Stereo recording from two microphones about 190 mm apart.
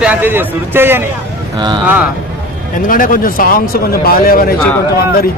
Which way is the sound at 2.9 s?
45° left (ahead or behind).